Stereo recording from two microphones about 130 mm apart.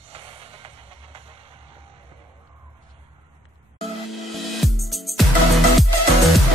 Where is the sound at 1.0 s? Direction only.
45° right (ahead or behind).